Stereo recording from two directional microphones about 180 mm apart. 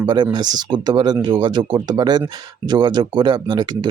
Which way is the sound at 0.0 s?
25° right (ahead or behind).